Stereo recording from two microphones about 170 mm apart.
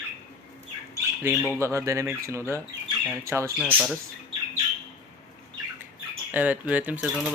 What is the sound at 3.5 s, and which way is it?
Speech, 10° right (ahead or behind).